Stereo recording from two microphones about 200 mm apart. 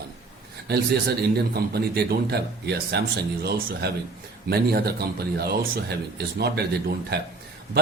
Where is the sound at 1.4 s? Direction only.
55° right (ahead or behind).